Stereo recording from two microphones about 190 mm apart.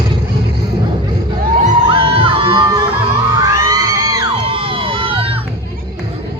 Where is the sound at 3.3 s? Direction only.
15° right (ahead or behind).